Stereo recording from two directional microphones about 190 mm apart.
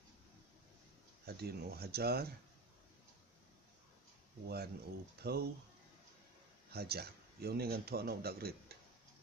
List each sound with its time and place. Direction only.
1.3 s speech: 55° right (ahead or behind)
4.4 s speech: 55° right (ahead or behind)
6.7 s speech: 55° right (ahead or behind)